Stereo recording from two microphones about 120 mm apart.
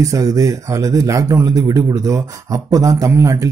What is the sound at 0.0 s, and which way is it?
Speech, 30° right (ahead or behind).